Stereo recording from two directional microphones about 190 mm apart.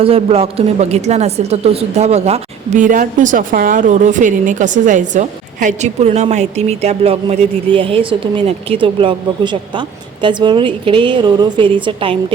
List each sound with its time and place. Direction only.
0.0 s a woman's voice: 30° right (ahead or behind)